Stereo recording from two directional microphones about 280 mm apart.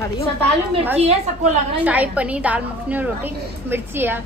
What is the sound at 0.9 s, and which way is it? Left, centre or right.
Speech, right.